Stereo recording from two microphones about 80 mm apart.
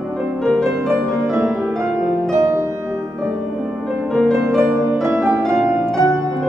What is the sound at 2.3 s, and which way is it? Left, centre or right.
Music, right.